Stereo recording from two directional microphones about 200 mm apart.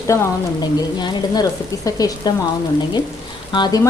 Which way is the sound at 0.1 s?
15° left (ahead or behind).